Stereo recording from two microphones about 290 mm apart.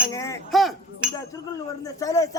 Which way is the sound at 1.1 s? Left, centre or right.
Centre.